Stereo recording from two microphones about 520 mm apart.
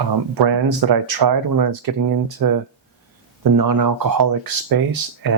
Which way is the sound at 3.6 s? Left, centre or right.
Right.